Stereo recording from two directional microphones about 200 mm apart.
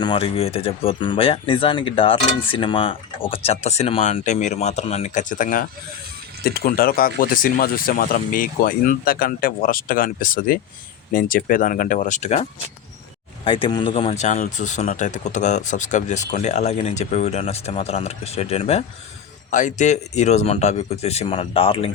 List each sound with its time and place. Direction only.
0.0 s speech: 25° left (ahead or behind)